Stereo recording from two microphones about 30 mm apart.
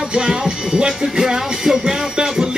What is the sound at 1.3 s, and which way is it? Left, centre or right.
Music, centre.